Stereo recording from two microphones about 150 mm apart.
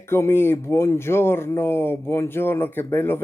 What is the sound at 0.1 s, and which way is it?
Speech, 15° left (ahead or behind).